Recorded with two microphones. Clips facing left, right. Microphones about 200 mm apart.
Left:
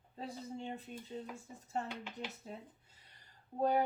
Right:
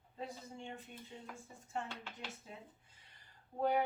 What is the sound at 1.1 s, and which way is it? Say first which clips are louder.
Speech: left 9 dB; 35° left (ahead or behind).